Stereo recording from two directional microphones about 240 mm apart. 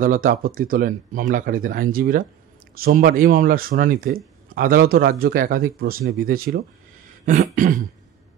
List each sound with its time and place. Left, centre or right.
0.0 s speech: right